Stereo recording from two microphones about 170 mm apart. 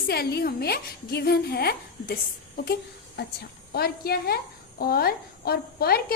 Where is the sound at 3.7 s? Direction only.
65° left (ahead or behind).